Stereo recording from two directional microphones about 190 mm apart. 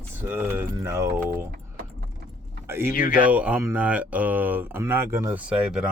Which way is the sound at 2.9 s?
50° left (ahead or behind).